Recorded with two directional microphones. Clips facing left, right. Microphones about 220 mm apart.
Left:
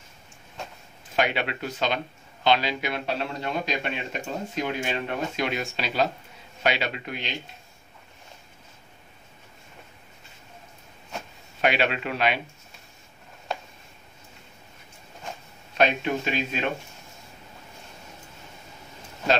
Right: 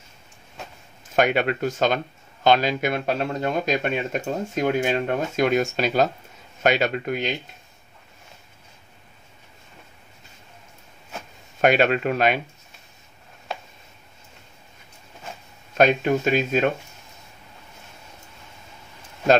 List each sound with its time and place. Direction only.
1.1 s a man's voice: 45° right (ahead or behind)
11.6 s a man's voice: 45° right (ahead or behind)
15.8 s a man's voice: 45° right (ahead or behind)